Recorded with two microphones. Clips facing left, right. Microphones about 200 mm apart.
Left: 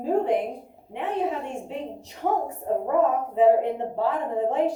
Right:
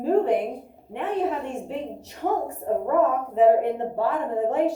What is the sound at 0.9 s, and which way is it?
Speech, 50° right (ahead or behind).